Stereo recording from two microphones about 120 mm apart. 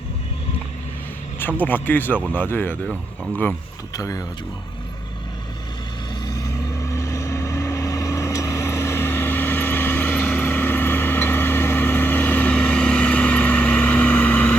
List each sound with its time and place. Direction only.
1.4 s speech: 15° left (ahead or behind)
3.9 s speech: 30° left (ahead or behind)
6.2 s vehicle: 30° left (ahead or behind); by 14.5 s 15° left (ahead or behind)